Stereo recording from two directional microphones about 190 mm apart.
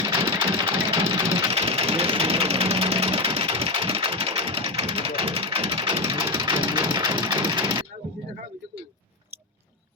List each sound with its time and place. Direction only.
0.3 s sewing machine: 25° right (ahead or behind)
6.1 s engine: 25° right (ahead or behind)